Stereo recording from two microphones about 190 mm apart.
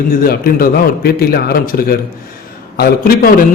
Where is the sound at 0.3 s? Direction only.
50° left (ahead or behind).